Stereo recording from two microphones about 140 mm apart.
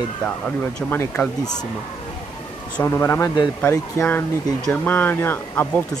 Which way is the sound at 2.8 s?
20° left (ahead or behind).